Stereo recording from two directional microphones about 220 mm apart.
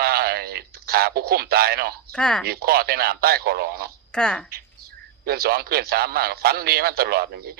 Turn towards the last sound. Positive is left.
turn(degrees=-45)  # may be behind; listen again after turning